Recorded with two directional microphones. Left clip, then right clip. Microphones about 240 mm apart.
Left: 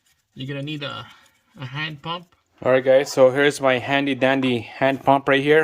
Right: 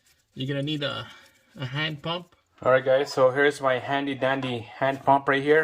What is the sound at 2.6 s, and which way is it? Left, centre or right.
Speech, left.